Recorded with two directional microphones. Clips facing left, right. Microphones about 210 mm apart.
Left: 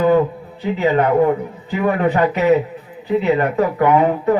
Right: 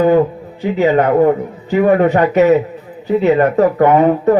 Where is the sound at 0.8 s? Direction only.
45° right (ahead or behind).